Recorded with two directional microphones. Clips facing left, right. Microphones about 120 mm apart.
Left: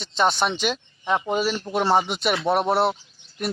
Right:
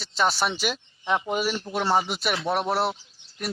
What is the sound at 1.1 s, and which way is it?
Speech, 25° left (ahead or behind).